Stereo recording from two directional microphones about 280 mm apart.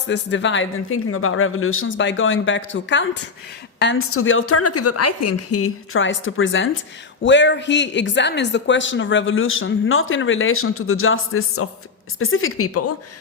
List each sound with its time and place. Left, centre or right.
0.1 s speech: left